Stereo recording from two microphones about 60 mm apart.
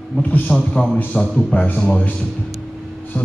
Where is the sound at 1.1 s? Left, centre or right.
Centre.